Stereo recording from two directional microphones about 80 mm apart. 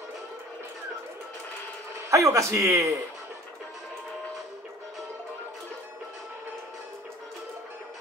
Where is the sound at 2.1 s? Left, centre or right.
Right.